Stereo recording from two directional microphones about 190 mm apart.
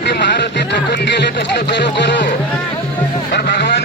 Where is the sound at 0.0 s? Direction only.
65° left (ahead or behind).